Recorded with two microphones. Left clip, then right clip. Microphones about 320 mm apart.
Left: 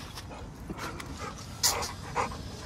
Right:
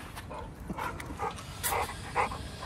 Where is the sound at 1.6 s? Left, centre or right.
Centre.